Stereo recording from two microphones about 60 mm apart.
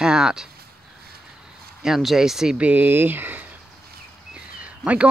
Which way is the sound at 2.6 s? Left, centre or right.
Right.